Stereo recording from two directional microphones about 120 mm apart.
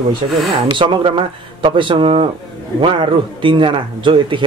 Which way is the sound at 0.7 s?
40° right (ahead or behind).